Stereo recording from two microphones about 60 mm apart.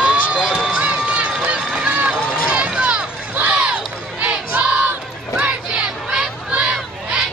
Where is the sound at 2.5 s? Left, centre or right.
Centre.